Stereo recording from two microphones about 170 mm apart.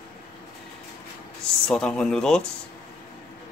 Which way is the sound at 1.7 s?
5° left (ahead or behind).